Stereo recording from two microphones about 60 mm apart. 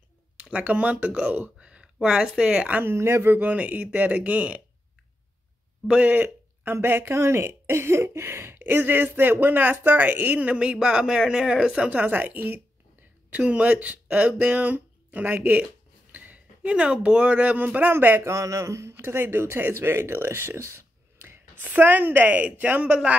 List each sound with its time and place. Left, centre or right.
0.4 s speech: right
2.8 s speech: right
5.9 s speech: right
12.0 s speech: right
18.2 s speech: right
21.5 s speech: right